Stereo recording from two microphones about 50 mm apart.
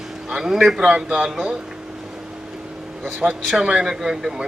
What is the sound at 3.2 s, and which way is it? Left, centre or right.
Speech, right.